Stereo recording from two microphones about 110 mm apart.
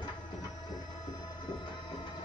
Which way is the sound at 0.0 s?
40° left (ahead or behind).